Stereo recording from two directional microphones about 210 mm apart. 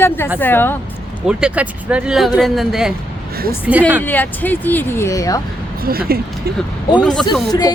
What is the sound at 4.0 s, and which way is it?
Speech, 10° left (ahead or behind).